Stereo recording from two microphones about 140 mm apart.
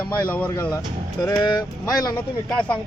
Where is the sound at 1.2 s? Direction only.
30° left (ahead or behind).